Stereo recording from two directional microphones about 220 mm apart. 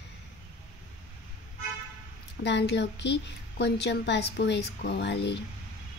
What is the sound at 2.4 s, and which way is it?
A woman's voice, 50° left (ahead or behind).